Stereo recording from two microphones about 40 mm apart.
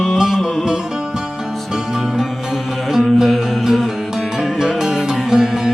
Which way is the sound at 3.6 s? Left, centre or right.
Centre.